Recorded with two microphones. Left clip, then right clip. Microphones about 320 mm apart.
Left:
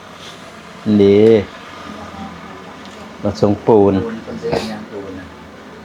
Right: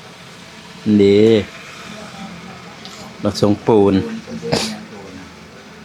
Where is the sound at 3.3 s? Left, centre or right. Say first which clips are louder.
Left 2 dB; centre.